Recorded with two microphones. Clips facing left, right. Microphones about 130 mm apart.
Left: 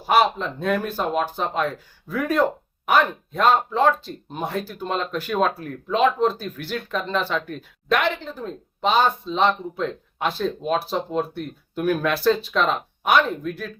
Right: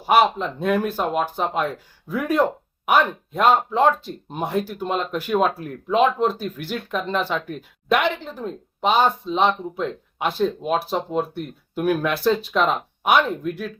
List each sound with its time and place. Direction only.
0.0 s speech: 10° right (ahead or behind)